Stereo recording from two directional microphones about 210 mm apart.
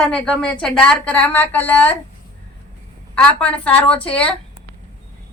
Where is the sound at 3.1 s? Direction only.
5° left (ahead or behind).